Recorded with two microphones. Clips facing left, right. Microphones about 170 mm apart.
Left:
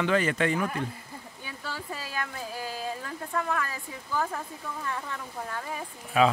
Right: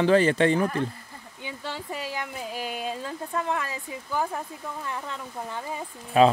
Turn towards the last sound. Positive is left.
turn(degrees=-35)  # may be behind; listen again after turning